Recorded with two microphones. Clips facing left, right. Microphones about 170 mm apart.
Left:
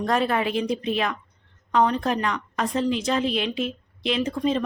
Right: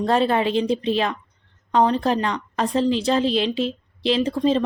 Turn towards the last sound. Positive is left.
turn(degrees=-30)  # may be behind; listen again after turning